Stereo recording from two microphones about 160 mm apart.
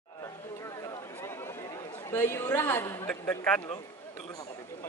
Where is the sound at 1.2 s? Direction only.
15° left (ahead or behind).